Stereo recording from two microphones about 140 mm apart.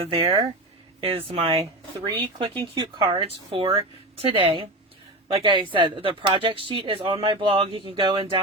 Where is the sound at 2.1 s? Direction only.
35° right (ahead or behind).